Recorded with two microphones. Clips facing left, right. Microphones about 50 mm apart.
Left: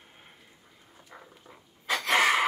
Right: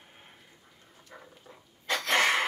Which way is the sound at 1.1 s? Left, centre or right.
Centre.